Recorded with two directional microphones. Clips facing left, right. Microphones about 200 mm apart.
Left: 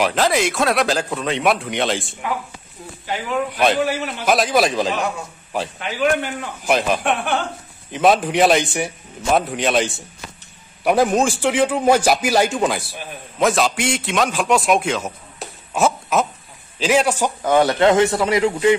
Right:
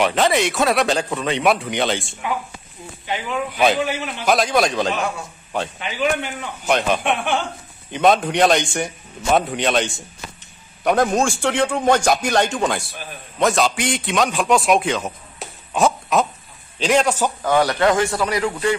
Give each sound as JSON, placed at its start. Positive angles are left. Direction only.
{"t": 0.0, "sound": "a man's voice", "side_deg": 0}